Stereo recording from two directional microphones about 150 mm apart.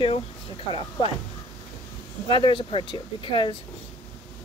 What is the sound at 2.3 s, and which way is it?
Speech, 35° left (ahead or behind).